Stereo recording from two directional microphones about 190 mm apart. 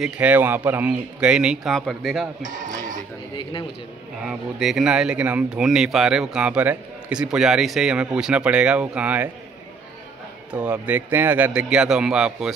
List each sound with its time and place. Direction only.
0.0 s speech: 10° right (ahead or behind)
2.4 s speech: 45° right (ahead or behind)
4.2 s speech: centre (ahead or behind)
10.5 s a man's voice: 10° right (ahead or behind)